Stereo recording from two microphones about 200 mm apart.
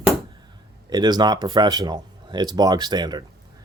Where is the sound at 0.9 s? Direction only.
20° right (ahead or behind).